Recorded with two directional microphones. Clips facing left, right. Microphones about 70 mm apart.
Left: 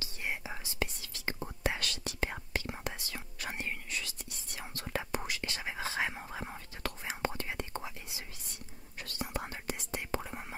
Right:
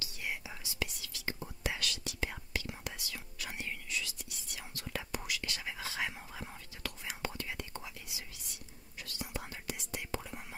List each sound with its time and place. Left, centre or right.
0.0 s whispering: left
8.9 s whispering: left